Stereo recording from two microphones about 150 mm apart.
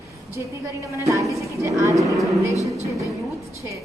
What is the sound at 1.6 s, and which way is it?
Speech, 20° right (ahead or behind).